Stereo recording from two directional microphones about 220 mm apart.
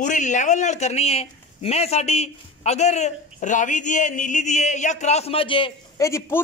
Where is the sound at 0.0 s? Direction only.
35° left (ahead or behind).